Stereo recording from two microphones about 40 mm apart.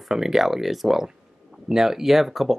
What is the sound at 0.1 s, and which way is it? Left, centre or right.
Speech, centre.